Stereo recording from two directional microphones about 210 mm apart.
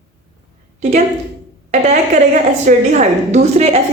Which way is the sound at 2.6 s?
35° right (ahead or behind).